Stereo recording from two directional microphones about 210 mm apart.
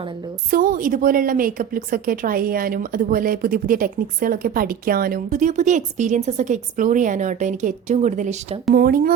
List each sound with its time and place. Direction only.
0.5 s a woman's voice: 40° right (ahead or behind)
8.7 s speech: 45° right (ahead or behind)